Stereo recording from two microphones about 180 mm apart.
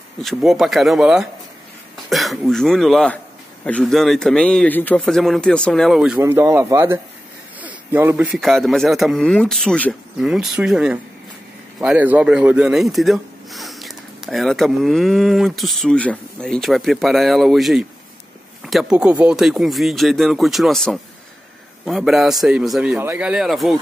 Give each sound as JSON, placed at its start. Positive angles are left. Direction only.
{"t": 0.2, "sound": "speech", "side_deg": 0}